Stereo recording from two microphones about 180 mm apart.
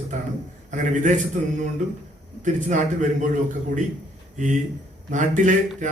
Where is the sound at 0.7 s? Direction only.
45° right (ahead or behind).